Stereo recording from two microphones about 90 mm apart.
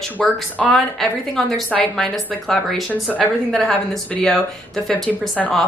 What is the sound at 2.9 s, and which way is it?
Speech, 20° left (ahead or behind).